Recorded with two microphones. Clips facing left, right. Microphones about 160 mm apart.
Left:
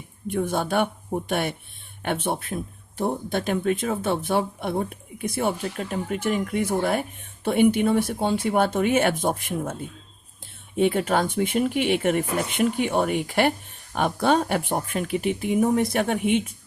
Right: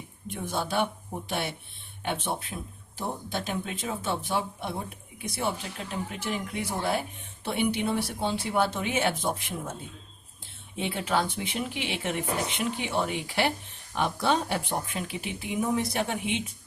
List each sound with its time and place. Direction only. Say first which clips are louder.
0.3 s speech: left 7 dB; 55° left (ahead or behind)
10.8 s speech: left 7 dB; 50° left (ahead or behind)